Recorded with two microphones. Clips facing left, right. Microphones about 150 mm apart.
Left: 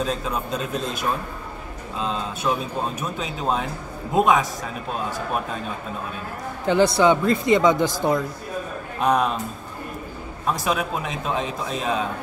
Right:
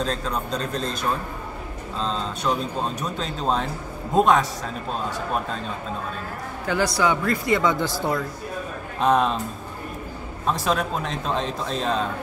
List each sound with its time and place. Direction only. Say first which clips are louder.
0.0 s a man's voice: left 1 dB; 10° left (ahead or behind)
2.0 s a man's voice: even; 10° left (ahead or behind)
6.7 s speech: left 5 dB; 25° left (ahead or behind)
9.0 s speech: right 1 dB; 5° left (ahead or behind)
10.4 s a man's voice: even; 5° left (ahead or behind)